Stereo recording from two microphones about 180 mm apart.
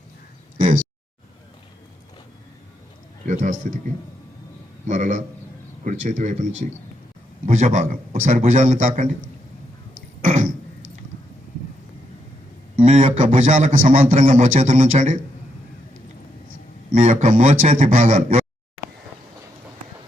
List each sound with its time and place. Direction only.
0.6 s a sound: 45° right (ahead or behind)
3.2 s a man's voice: 40° right (ahead or behind)
4.9 s speech: 40° right (ahead or behind)
10.2 s throat clearing: 45° right (ahead or behind)
12.7 s a man's voice: 45° right (ahead or behind)
16.9 s speech: 45° right (ahead or behind)